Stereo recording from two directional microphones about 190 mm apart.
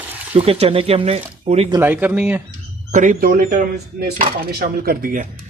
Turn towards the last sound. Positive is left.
turn(degrees=-45)  # may be behind; listen again after turning